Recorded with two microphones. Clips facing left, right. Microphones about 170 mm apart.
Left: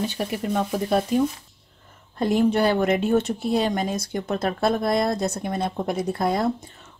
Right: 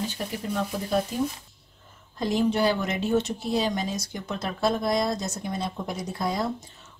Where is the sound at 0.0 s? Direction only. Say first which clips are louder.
Left 5 dB; 65° left (ahead or behind).